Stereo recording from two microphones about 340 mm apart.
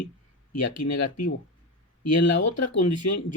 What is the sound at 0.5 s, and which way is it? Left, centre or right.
Speech, left.